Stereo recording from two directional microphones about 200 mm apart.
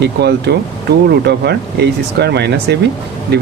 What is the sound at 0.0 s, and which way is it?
Speech, 55° right (ahead or behind).